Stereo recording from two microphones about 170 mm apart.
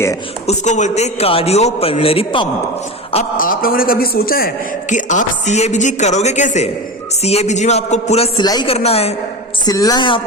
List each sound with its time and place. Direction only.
0.4 s a man's voice: 45° left (ahead or behind)
3.3 s a man's voice: 55° left (ahead or behind); by 8.4 s 35° left (ahead or behind)
8.4 s a woman's voice: 25° left (ahead or behind)
8.7 s a man's voice: 35° left (ahead or behind)
9.6 s a woman's voice: 20° left (ahead or behind)